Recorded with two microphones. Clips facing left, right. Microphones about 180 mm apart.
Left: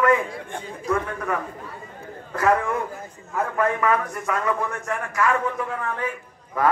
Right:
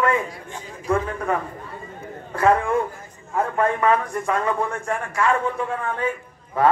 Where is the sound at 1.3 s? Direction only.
30° right (ahead or behind).